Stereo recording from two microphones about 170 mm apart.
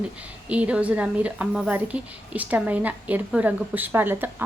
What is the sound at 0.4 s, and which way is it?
A woman's voice, 10° right (ahead or behind).